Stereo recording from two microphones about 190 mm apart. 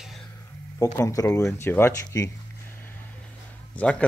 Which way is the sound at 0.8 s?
15° left (ahead or behind).